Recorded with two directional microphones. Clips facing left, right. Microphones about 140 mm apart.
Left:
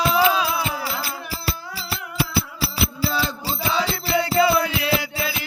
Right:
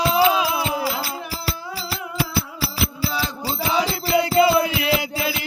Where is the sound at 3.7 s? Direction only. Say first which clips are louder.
Right 2 dB; 15° right (ahead or behind).